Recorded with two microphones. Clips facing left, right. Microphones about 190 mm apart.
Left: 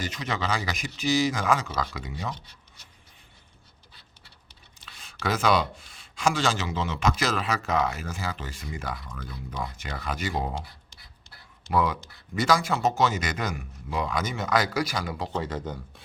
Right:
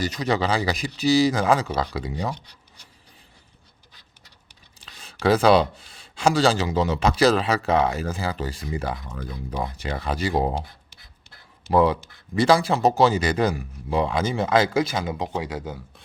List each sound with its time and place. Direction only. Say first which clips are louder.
0.0 s speech: right 7 dB; 35° right (ahead or behind)
5.2 s speech: right 7 dB; 30° right (ahead or behind)
11.7 s speech: right 7 dB; 30° right (ahead or behind)
15.3 s speech: right 2 dB; 10° right (ahead or behind)